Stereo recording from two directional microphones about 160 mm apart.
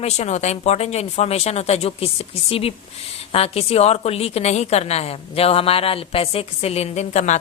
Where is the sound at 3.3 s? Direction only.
40° left (ahead or behind).